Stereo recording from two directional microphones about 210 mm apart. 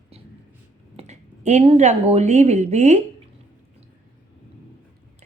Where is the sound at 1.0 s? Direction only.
35° right (ahead or behind).